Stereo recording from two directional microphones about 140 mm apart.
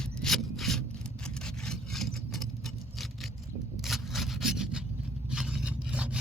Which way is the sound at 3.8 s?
Centre (ahead or behind).